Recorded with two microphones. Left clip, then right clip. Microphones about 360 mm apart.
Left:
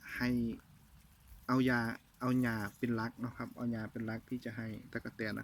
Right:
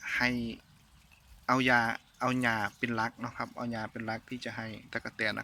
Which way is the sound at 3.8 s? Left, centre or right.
Right.